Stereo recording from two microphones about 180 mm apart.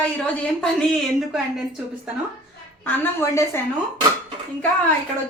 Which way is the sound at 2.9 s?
15° left (ahead or behind).